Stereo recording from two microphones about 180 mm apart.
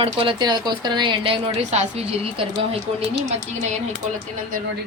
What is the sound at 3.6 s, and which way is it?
Speech, 40° right (ahead or behind).